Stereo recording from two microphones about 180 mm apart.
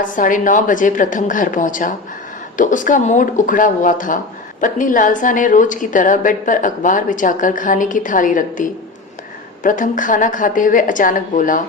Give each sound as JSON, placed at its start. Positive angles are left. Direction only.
{"t": 0.0, "sound": "a woman's voice", "side_deg": 45}